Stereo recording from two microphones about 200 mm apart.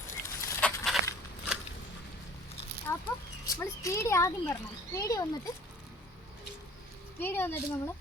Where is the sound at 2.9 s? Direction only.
15° left (ahead or behind).